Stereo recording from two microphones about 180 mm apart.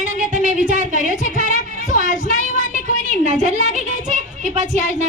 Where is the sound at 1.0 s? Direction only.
45° left (ahead or behind).